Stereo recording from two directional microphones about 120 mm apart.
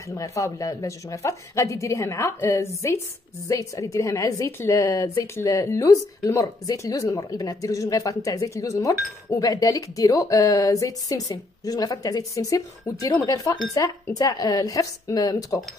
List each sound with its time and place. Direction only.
0.1 s a woman's voice: 25° left (ahead or behind)